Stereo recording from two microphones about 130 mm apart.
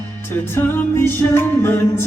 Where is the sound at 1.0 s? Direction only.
15° left (ahead or behind).